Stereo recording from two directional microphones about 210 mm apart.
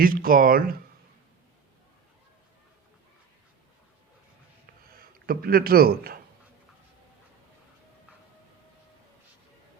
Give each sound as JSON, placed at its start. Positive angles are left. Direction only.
{"t": 0.0, "sound": "a man's voice", "side_deg": -40}
{"t": 5.2, "sound": "a man's voice", "side_deg": -45}